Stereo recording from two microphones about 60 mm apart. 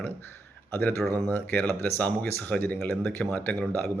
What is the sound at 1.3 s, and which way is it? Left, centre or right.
Speech, left.